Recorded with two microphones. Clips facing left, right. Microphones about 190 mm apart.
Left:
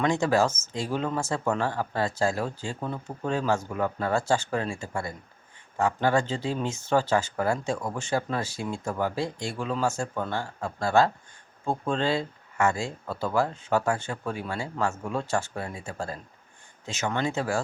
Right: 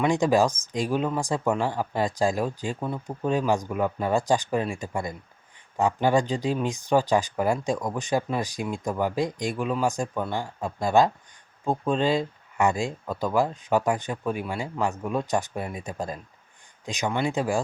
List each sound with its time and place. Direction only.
0.0 s speech: 15° right (ahead or behind)